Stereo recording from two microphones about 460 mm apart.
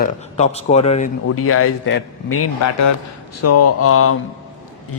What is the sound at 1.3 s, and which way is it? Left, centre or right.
A man's voice, left.